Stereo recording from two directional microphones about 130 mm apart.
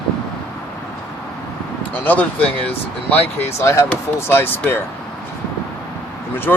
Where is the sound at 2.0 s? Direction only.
15° left (ahead or behind).